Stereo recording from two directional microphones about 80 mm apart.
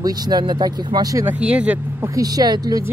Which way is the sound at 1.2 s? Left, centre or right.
Centre.